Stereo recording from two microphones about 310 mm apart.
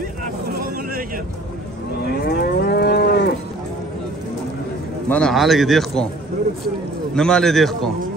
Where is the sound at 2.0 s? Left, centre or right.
Left.